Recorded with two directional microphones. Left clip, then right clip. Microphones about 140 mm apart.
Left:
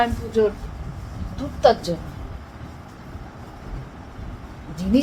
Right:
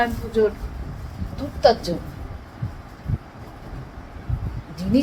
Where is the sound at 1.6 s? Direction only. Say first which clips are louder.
Even; 10° left (ahead or behind).